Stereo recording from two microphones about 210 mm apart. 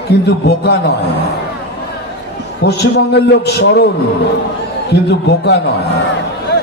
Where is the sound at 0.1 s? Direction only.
55° left (ahead or behind).